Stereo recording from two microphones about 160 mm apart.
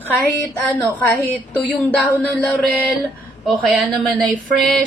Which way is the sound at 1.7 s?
10° left (ahead or behind).